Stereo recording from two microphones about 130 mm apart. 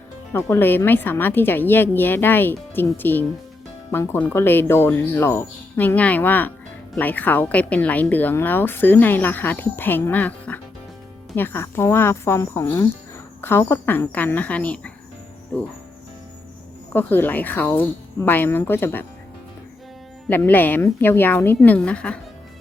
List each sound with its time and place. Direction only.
0.3 s a woman's voice: 20° left (ahead or behind)
16.9 s a woman's voice: 15° left (ahead or behind)
20.2 s a woman's voice: 15° left (ahead or behind)